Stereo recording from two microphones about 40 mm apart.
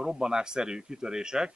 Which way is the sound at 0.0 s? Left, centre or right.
Centre.